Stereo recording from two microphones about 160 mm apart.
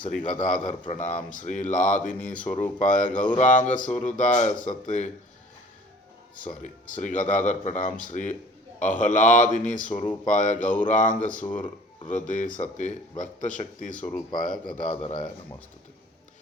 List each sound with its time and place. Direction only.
0.1 s a man's voice: 55° left (ahead or behind)
6.4 s a man's voice: 55° left (ahead or behind)
14.6 s a man's voice: 35° left (ahead or behind)